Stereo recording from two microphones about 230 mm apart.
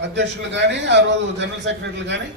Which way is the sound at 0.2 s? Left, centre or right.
Right.